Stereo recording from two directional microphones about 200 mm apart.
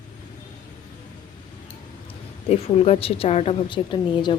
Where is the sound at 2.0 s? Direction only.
30° left (ahead or behind).